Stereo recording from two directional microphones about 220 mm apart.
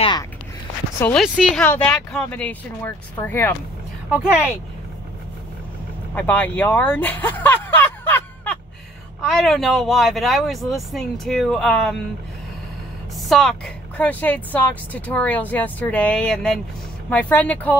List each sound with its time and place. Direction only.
0.0 s speech: 20° left (ahead or behind)
0.9 s speech: 10° left (ahead or behind)
1.2 s speech: centre (ahead or behind)
6.1 s speech: 10° left (ahead or behind)
13.2 s speech: centre (ahead or behind)